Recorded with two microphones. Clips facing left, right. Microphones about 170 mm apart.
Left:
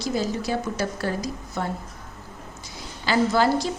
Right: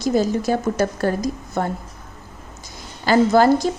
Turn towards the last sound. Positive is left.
turn(degrees=-45)  # may be behind; listen again after turning